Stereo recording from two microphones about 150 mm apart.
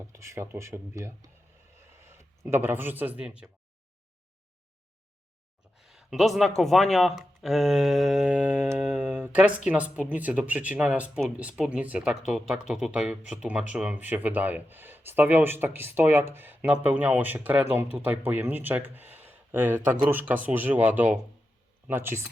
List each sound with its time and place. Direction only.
0.1 s speech: 20° right (ahead or behind)
5.7 s a sound: centre (ahead or behind)
6.6 s speech: centre (ahead or behind); by 22.3 s 15° right (ahead or behind)